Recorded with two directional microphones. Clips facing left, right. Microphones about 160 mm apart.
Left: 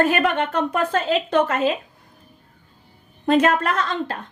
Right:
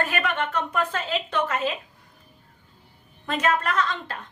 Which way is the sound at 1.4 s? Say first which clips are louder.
Left 6 dB; 60° left (ahead or behind).